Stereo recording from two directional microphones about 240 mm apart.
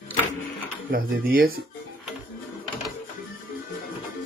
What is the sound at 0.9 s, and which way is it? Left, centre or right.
Speech, right.